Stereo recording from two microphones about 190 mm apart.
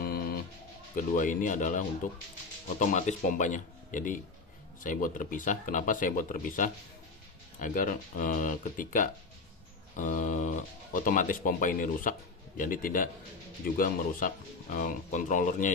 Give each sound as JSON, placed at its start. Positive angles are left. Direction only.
{"t": 0.0, "sound": "bird", "side_deg": 50}
{"t": 0.9, "sound": "speech", "side_deg": 45}